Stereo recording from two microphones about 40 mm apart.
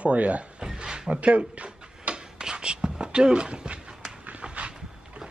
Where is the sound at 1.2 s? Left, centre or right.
Right.